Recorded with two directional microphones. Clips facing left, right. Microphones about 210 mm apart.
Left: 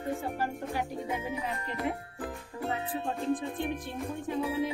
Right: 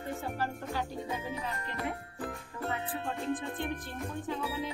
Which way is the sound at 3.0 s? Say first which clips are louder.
Left 5 dB; centre (ahead or behind).